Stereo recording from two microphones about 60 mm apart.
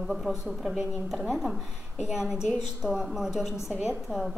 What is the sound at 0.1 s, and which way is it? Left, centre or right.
Speech, centre.